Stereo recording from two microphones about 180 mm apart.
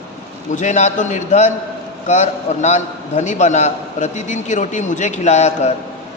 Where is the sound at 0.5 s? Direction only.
45° left (ahead or behind).